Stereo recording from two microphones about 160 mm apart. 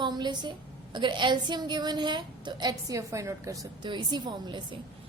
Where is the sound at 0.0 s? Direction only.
25° right (ahead or behind).